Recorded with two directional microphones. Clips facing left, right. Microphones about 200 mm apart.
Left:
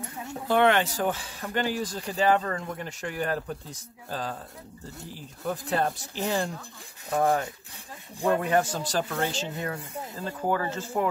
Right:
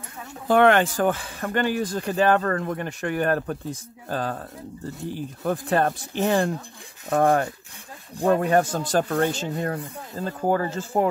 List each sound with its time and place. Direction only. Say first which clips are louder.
0.5 s speech: right 5 dB; 50° right (ahead or behind)
8.2 s speech: right 4 dB; 45° right (ahead or behind)
10.2 s speech: right 5 dB; 40° right (ahead or behind)